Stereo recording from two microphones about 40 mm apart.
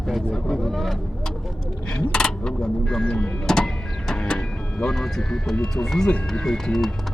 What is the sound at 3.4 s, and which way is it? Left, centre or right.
Speech, centre.